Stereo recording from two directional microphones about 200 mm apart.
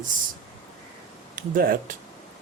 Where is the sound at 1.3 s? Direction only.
45° right (ahead or behind).